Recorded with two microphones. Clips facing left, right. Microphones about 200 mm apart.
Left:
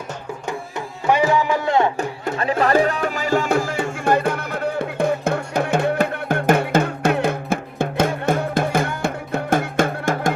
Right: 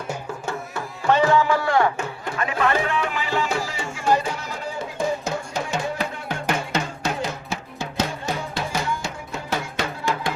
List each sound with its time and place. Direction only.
1.0 s music: 15° left (ahead or behind)
2.3 s music: 35° left (ahead or behind); by 10.3 s 50° left (ahead or behind)